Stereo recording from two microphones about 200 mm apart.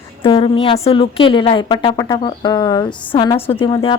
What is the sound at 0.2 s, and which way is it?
Speech, 25° left (ahead or behind).